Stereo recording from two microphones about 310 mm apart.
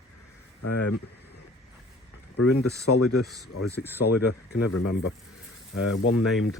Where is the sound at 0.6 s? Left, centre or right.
Left.